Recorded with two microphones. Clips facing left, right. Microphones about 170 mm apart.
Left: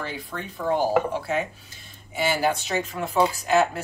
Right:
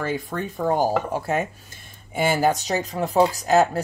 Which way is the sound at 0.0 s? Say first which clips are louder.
Right 6 dB; 45° right (ahead or behind).